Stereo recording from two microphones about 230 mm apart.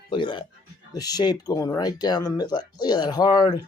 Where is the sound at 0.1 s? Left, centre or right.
Centre.